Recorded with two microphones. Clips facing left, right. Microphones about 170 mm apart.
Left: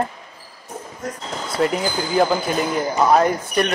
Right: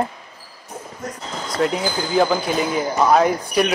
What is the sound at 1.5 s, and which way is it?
Speech, centre (ahead or behind).